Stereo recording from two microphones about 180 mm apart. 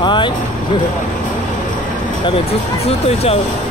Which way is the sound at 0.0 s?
25° left (ahead or behind).